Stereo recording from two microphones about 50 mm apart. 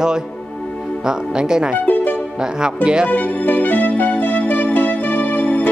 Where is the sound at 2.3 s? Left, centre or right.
Centre.